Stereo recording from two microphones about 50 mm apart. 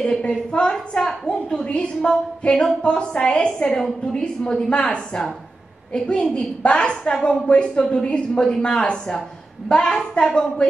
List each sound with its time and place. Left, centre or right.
0.0 s a woman's voice: centre
5.9 s a woman's voice: centre